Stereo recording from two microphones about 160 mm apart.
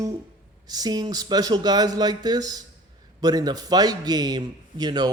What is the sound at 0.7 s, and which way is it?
Speech, 25° right (ahead or behind).